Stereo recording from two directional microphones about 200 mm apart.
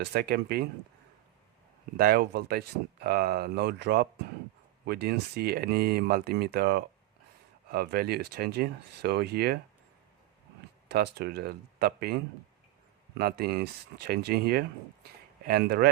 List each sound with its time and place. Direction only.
0.0 s speech: 50° right (ahead or behind)
2.0 s speech: 50° right (ahead or behind)
10.8 s speech: 55° right (ahead or behind)